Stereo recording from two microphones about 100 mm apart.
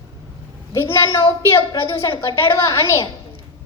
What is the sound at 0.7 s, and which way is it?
A woman's voice, 25° left (ahead or behind).